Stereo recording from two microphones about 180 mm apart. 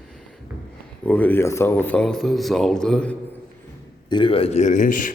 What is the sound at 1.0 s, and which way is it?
Speech, 10° left (ahead or behind).